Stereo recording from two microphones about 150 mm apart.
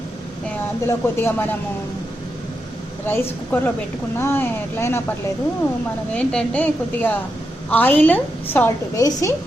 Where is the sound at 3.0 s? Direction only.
15° left (ahead or behind).